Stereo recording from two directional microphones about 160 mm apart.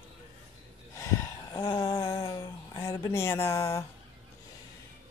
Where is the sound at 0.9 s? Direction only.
20° left (ahead or behind).